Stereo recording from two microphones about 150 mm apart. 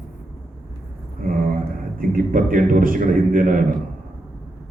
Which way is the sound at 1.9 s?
70° right (ahead or behind).